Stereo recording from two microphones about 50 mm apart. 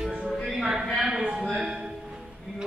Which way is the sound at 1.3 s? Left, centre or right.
Right.